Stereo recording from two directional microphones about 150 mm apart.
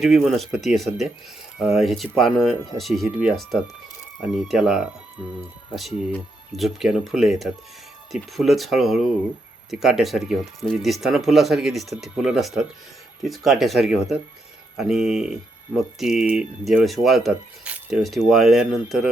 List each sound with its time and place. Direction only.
0.0 s speech: centre (ahead or behind)
6.6 s speech: centre (ahead or behind)